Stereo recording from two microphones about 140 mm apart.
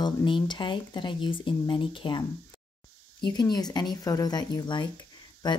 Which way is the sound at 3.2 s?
30° left (ahead or behind).